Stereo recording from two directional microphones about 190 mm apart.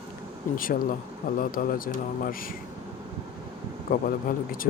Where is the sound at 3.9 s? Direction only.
45° left (ahead or behind).